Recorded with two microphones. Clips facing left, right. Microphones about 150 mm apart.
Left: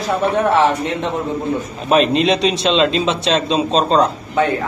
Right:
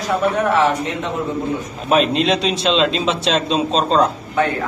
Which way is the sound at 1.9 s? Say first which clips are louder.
Left 2 dB; centre (ahead or behind).